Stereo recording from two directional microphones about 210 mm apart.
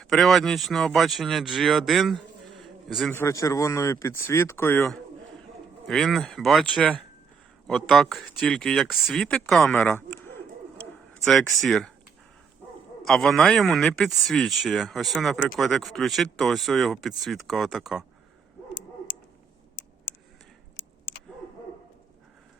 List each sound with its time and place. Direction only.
0.0 s speech: centre (ahead or behind)
13.1 s speech: centre (ahead or behind)